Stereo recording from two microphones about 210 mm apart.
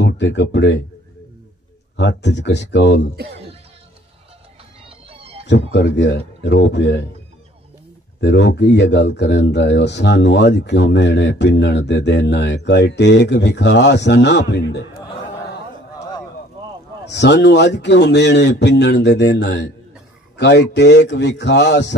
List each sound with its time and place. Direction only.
0.0 s speech: 55° left (ahead or behind)
2.0 s speech: 55° left (ahead or behind)
4.8 s music: 25° right (ahead or behind)
5.5 s speech: 55° left (ahead or behind)
8.2 s speech: 55° left (ahead or behind)
17.0 s speech: 55° left (ahead or behind)